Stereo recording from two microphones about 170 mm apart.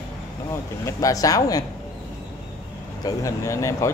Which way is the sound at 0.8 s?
20° left (ahead or behind).